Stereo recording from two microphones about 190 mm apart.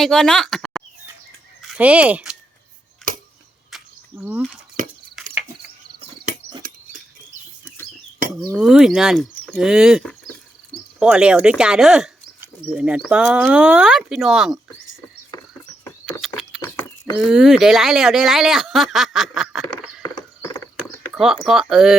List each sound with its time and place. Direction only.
0.0 s speech: centre (ahead or behind)
3.0 s a sound: 5° left (ahead or behind)
3.7 s cricket: 10° right (ahead or behind)
4.8 s a sound: 45° right (ahead or behind)
5.2 s cricket: centre (ahead or behind)
8.5 s speech: 5° right (ahead or behind)
16.2 s a sound: centre (ahead or behind)
17.2 s speech: centre (ahead or behind)
20.0 s horse: 20° left (ahead or behind)
21.4 s speech: centre (ahead or behind)